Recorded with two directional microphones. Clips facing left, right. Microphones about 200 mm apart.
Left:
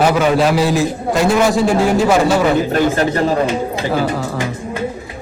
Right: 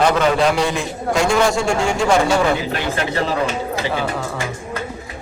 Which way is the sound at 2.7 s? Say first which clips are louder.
Left 7 dB; 45° left (ahead or behind).